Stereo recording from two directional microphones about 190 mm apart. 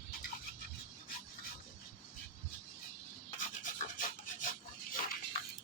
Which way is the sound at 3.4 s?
45° left (ahead or behind).